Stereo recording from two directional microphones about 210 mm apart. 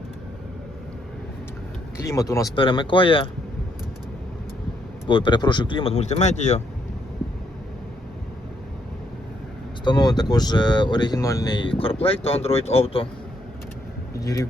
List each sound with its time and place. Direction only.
2.0 s speech: 15° left (ahead or behind)
5.0 s speech: 25° left (ahead or behind)
9.8 s speech: 20° left (ahead or behind)
14.2 s a man's voice: 15° left (ahead or behind)